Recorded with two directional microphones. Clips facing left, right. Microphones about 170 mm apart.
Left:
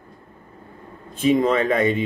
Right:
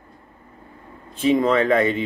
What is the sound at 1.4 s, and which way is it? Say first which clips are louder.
Speech: right 1 dB; 20° left (ahead or behind).